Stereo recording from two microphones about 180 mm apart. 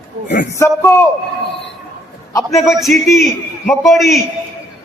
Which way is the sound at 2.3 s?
15° left (ahead or behind).